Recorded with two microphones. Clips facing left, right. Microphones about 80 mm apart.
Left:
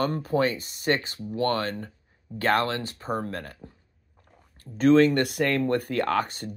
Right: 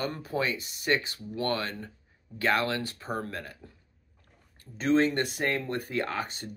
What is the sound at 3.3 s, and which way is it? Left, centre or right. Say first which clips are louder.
Speech: left 3 dB; left.